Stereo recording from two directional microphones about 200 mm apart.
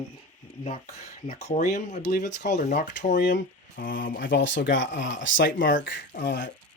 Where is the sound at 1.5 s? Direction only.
35° left (ahead or behind).